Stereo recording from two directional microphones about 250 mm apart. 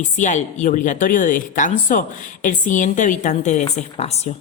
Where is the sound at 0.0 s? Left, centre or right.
Left.